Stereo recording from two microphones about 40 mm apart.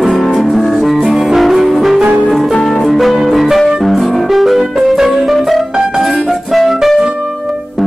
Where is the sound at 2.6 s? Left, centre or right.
Centre.